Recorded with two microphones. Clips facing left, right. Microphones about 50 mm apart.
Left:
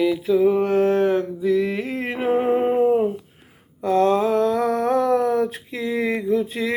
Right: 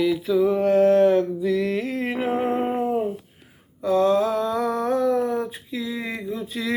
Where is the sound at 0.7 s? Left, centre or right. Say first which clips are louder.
Right 2 dB; left.